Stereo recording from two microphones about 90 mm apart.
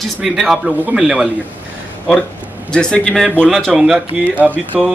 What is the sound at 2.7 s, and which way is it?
Speech, 10° left (ahead or behind).